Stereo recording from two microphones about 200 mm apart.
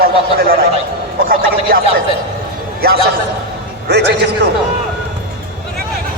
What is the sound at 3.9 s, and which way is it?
Speech, 60° right (ahead or behind).